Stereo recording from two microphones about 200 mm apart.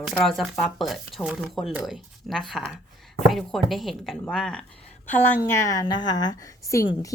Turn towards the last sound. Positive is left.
turn(degrees=15)  # may be behind; listen again after turning